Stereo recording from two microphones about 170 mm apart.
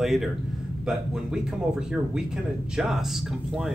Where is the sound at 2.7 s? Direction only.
5° right (ahead or behind).